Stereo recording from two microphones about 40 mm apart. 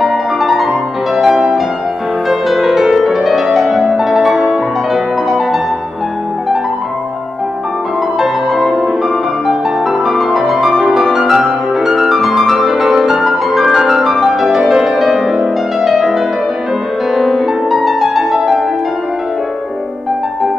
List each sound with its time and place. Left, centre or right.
0.0 s music: centre
3.4 s music: centre
3.9 s music: centre
8.2 s music: centre
17.1 s music: centre